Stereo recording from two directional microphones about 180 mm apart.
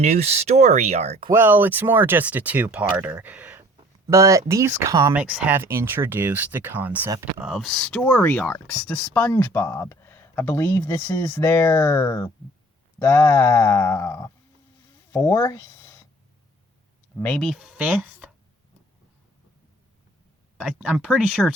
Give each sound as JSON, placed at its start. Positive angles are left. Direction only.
{"t": 0.0, "sound": "speech", "side_deg": -35}
{"t": 1.3, "sound": "speech", "side_deg": -10}
{"t": 17.2, "sound": "speech", "side_deg": 5}
{"t": 20.6, "sound": "speech", "side_deg": -5}